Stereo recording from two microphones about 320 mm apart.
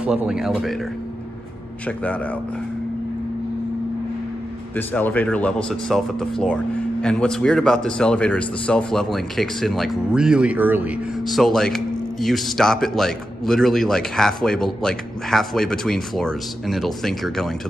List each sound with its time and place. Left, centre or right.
0.0 s speech: centre
1.9 s speech: centre
4.7 s speech: centre